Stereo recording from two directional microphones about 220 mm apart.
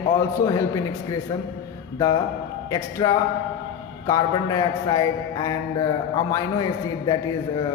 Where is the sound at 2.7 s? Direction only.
15° left (ahead or behind).